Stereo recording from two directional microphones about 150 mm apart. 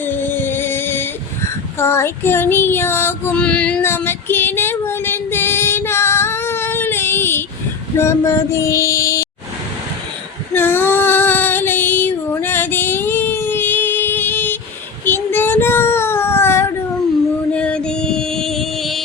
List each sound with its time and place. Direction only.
0.0 s music: 15° left (ahead or behind)
1.8 s child singing: 15° left (ahead or behind)
7.9 s female singing: 20° left (ahead or behind)
10.5 s female singing: 15° left (ahead or behind)
15.0 s child singing: 15° left (ahead or behind)
17.5 s music: 10° left (ahead or behind)